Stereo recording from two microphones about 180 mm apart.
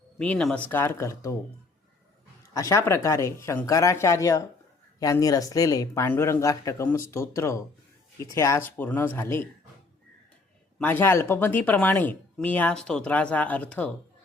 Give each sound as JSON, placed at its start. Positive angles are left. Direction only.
{"t": 0.2, "sound": "speech", "side_deg": 5}
{"t": 2.5, "sound": "speech", "side_deg": 15}
{"t": 10.8, "sound": "speech", "side_deg": 10}